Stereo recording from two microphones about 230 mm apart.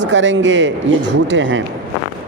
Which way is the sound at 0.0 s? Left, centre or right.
Right.